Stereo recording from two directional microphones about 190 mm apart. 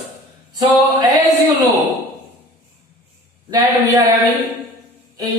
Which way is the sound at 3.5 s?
20° right (ahead or behind).